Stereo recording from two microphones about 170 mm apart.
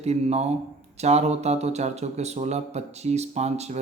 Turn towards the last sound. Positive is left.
turn(degrees=-40)  # may be behind; listen again after turning